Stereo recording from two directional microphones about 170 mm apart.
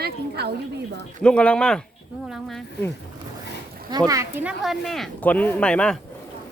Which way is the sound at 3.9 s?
20° right (ahead or behind).